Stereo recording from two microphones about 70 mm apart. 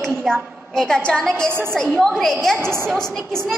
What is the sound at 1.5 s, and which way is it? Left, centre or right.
Speech, right.